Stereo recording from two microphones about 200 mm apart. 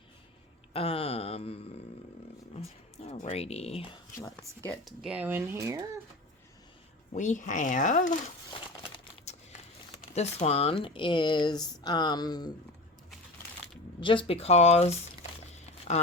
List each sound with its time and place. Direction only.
0.7 s a sound: 30° left (ahead or behind)
2.6 s speech: 30° left (ahead or behind)
4.6 s speech: centre (ahead or behind); by 5.8 s 15° right (ahead or behind)
7.1 s speech: 35° left (ahead or behind)
9.3 s a sound: 35° left (ahead or behind)
10.2 s speech: 30° left (ahead or behind)
14.0 s speech: 25° left (ahead or behind)
15.5 s crumpling: 35° left (ahead or behind)